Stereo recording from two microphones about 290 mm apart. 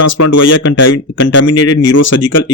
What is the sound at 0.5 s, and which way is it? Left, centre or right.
Speech, left.